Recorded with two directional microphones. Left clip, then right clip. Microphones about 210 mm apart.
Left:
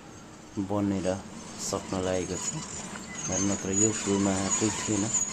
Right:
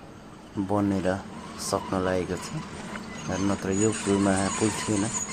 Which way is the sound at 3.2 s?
50° right (ahead or behind).